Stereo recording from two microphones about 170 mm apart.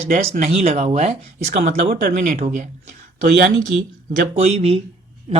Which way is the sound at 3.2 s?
65° right (ahead or behind).